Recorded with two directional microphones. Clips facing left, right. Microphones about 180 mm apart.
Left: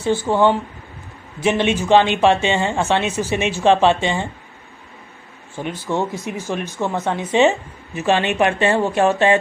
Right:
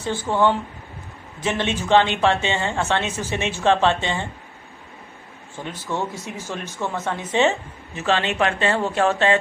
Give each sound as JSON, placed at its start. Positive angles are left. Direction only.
{"t": 0.2, "sound": "speech", "side_deg": 15}
{"t": 5.6, "sound": "speech", "side_deg": 15}